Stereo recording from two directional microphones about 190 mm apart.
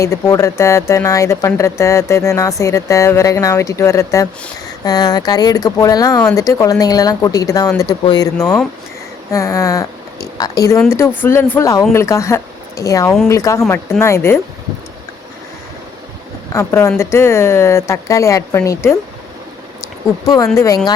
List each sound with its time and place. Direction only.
0.0 s speech: 15° left (ahead or behind)
16.5 s speech: 15° left (ahead or behind)
20.2 s speech: 20° left (ahead or behind)